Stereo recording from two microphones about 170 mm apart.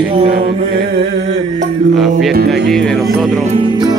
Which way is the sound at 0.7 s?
75° right (ahead or behind).